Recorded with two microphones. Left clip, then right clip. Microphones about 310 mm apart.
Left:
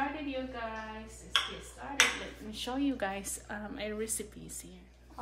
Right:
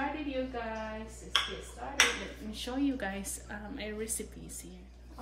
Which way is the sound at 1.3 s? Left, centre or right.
Centre.